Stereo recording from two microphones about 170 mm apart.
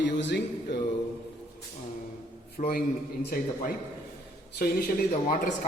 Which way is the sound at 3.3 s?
60° left (ahead or behind).